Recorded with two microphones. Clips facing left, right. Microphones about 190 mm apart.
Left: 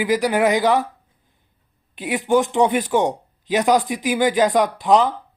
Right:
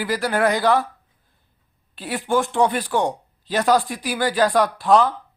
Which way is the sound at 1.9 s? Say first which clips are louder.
Left 4 dB; 15° left (ahead or behind).